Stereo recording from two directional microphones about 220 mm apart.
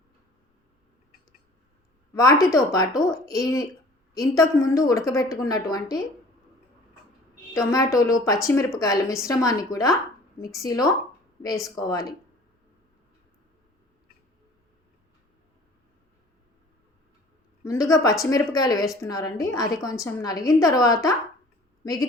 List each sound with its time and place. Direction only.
2.1 s a woman's voice: 15° left (ahead or behind)
7.5 s a woman's voice: 15° left (ahead or behind)
17.6 s a woman's voice: 15° left (ahead or behind)